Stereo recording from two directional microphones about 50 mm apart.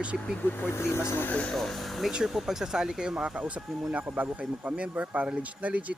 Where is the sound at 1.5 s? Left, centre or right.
Centre.